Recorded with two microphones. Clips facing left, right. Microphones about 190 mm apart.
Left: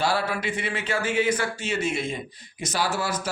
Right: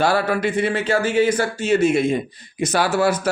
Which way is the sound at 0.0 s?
50° right (ahead or behind).